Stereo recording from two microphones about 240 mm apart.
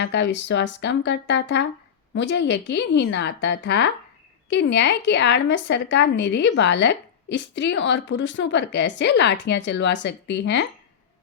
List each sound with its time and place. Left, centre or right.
0.0 s a woman's voice: left